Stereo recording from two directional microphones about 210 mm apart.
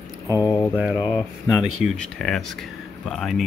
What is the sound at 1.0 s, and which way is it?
Speech, centre (ahead or behind).